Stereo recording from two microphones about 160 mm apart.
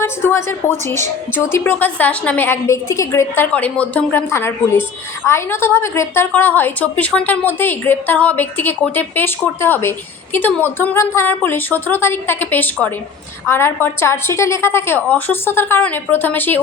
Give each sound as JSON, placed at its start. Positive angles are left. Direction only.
{"t": 0.0, "sound": "a woman's voice", "side_deg": 15}